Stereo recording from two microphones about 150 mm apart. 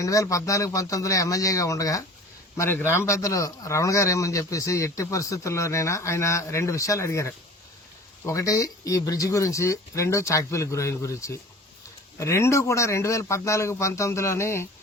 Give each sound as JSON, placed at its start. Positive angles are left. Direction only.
{"t": 0.0, "sound": "a man's voice", "side_deg": 20}